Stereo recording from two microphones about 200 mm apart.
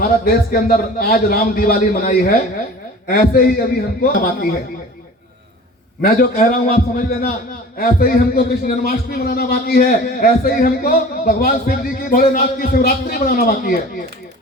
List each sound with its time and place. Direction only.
0.0 s a man's voice: 50° left (ahead or behind)
6.0 s a man's voice: 45° left (ahead or behind)